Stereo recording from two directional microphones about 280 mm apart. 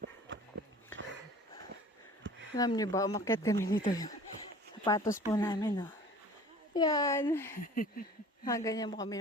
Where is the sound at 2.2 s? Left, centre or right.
Right.